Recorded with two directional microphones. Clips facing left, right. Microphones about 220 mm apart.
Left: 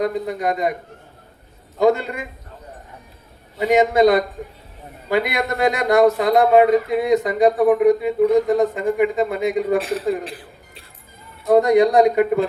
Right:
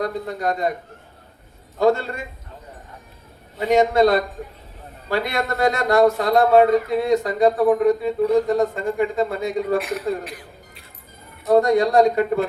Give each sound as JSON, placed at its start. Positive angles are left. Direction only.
{"t": 0.0, "sound": "a man's voice", "side_deg": 20}
{"t": 1.8, "sound": "a man's voice", "side_deg": 15}
{"t": 3.6, "sound": "a man's voice", "side_deg": 15}
{"t": 9.7, "sound": "a man's voice", "side_deg": 30}
{"t": 10.2, "sound": "music", "side_deg": 30}
{"t": 11.5, "sound": "a man's voice", "side_deg": 15}